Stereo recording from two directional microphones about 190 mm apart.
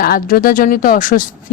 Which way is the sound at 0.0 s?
50° left (ahead or behind).